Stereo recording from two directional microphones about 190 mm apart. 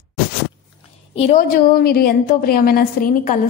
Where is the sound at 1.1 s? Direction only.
40° left (ahead or behind).